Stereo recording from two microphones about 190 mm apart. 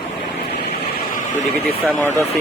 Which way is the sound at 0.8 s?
45° left (ahead or behind).